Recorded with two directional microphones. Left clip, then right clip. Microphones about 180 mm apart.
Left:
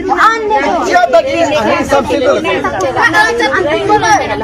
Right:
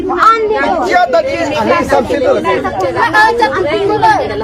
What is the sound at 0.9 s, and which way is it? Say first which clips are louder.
Speech: left 3 dB; 35° right (ahead or behind).